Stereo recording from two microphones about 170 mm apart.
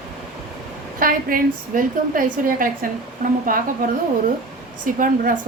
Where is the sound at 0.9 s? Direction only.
55° right (ahead or behind).